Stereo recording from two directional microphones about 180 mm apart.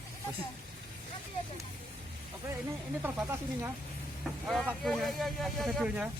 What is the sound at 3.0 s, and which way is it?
Speech, 10° right (ahead or behind).